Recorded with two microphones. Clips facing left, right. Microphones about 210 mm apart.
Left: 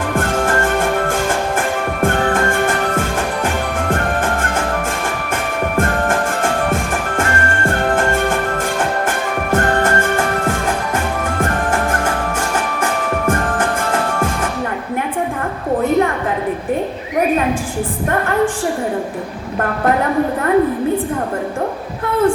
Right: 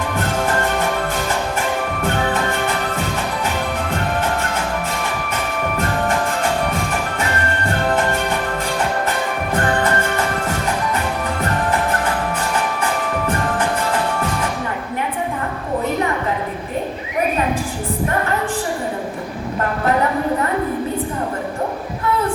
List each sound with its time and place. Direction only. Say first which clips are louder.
0.1 s music: left 4 dB; 50° left (ahead or behind)